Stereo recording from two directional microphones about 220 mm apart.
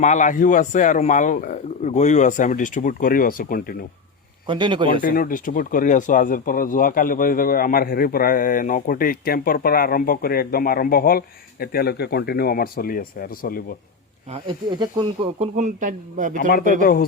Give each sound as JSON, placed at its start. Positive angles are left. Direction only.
{"t": 0.0, "sound": "speech", "side_deg": 35}
{"t": 4.4, "sound": "speech", "side_deg": -20}
{"t": 5.0, "sound": "speech", "side_deg": 40}
{"t": 14.3, "sound": "speech", "side_deg": -20}
{"t": 16.5, "sound": "speech", "side_deg": 40}